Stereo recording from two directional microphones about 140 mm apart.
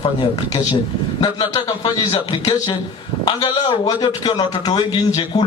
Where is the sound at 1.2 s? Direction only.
30° left (ahead or behind).